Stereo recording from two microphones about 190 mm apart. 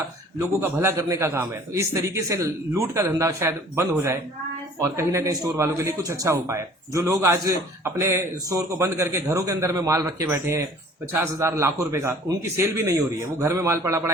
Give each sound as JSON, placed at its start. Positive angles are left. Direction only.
{"t": 0.3, "sound": "a man's voice", "side_deg": -15}